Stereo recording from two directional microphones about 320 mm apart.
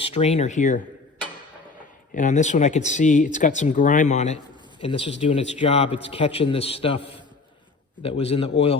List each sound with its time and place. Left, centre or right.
0.0 s speech: centre
2.1 s a man's voice: left